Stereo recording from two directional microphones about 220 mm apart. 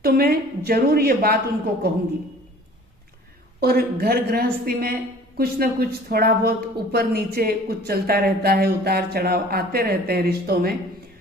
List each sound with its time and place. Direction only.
0.0 s speech: 45° right (ahead or behind)
3.6 s speech: 45° right (ahead or behind)